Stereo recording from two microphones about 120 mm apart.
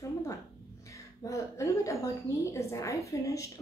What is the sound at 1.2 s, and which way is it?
A woman's voice, 25° left (ahead or behind).